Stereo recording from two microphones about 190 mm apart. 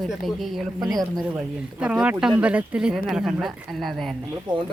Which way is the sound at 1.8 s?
5° right (ahead or behind).